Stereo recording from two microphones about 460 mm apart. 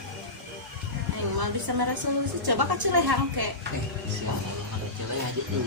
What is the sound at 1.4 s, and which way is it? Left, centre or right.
Speech, right.